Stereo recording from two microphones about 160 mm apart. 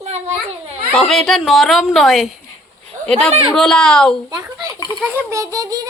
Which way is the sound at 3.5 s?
5° left (ahead or behind).